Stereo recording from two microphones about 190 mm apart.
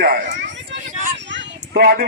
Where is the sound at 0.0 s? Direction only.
50° right (ahead or behind).